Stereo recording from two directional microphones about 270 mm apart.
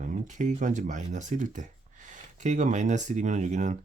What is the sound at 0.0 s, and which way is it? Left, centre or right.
Speech, right.